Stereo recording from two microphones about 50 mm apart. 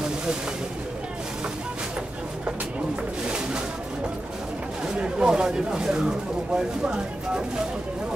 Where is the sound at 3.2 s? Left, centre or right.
Centre.